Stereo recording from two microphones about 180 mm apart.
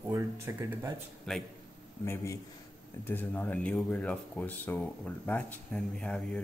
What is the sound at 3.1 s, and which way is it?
Speech, 10° left (ahead or behind).